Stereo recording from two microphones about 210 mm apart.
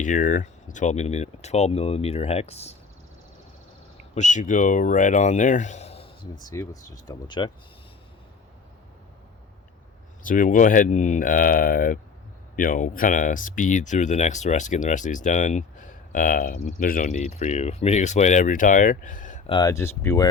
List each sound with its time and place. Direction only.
0.0 s speech: 35° left (ahead or behind)
4.1 s speech: 35° left (ahead or behind)
10.2 s speech: 40° left (ahead or behind)
19.5 s speech: 20° left (ahead or behind)